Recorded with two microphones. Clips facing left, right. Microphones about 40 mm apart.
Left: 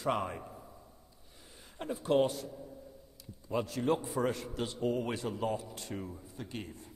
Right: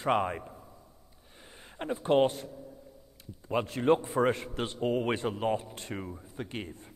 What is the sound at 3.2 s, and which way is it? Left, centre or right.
A man's voice, right.